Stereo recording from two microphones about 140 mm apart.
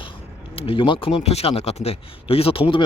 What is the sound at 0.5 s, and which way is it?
Speech, 40° left (ahead or behind).